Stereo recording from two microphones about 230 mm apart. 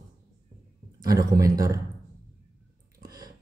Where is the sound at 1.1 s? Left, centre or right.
Centre.